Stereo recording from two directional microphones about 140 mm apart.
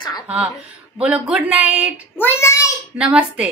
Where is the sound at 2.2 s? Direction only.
20° left (ahead or behind).